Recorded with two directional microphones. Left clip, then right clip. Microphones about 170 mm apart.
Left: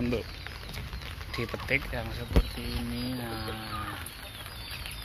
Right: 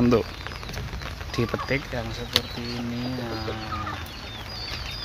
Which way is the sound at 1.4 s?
35° right (ahead or behind).